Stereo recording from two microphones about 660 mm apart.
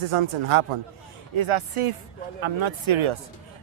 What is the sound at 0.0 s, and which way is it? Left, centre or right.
Speech, right.